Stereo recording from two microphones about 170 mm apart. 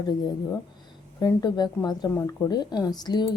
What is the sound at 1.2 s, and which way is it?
A woman's voice, 20° left (ahead or behind).